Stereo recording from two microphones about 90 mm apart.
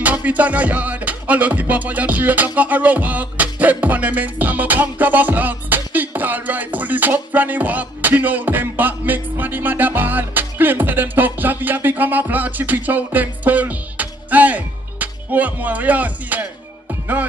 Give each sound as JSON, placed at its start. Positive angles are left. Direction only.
{"t": 0.0, "sound": "music", "side_deg": -15}